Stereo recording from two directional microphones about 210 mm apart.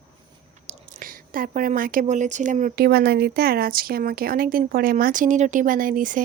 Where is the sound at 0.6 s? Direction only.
35° right (ahead or behind).